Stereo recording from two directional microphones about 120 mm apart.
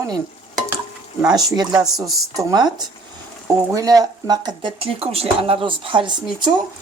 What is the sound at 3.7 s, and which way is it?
Speech, 30° right (ahead or behind).